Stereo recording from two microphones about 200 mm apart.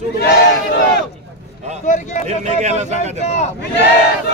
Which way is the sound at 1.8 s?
40° left (ahead or behind).